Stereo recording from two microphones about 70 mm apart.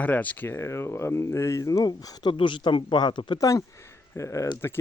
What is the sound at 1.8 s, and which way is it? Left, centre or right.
Speech, left.